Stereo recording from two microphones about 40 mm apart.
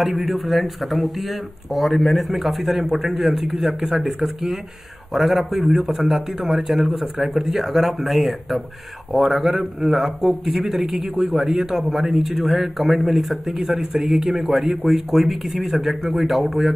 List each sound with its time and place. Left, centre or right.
0.1 s speech: centre
0.5 s speech: centre